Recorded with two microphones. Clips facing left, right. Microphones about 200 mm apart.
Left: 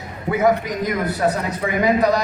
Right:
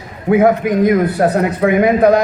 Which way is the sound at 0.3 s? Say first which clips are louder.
Right 7 dB; 55° right (ahead or behind).